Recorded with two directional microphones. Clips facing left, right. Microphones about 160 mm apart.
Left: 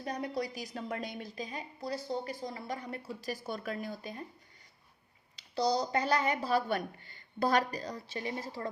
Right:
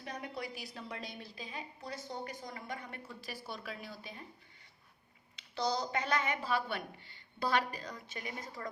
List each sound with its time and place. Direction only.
0.0 s a woman's voice: 35° left (ahead or behind)
5.4 s a woman's voice: 35° left (ahead or behind)